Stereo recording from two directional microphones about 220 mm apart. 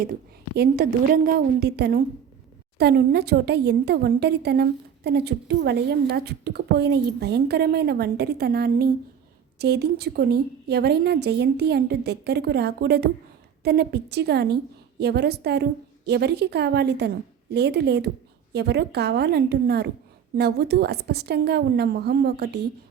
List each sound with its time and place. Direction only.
0.5 s a woman's voice: 45° right (ahead or behind)